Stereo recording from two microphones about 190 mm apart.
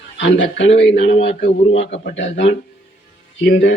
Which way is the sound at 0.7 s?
30° left (ahead or behind).